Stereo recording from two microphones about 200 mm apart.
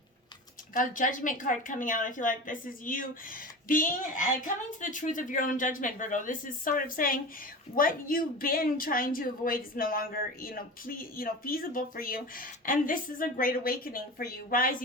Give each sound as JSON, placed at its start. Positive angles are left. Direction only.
{"t": 0.8, "sound": "a woman's voice", "side_deg": 40}